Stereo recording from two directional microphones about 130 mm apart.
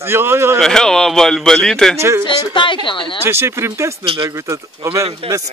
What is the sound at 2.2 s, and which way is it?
Speech, 40° left (ahead or behind).